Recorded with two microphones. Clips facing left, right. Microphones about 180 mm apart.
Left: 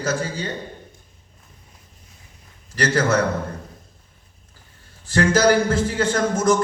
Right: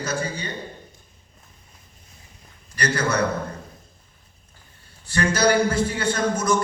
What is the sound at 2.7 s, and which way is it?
Speech, 90° left.